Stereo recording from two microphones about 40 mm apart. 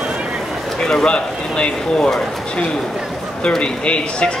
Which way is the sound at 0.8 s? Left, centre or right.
Centre.